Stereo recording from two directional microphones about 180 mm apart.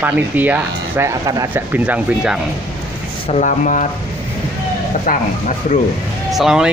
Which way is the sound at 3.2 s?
40° left (ahead or behind).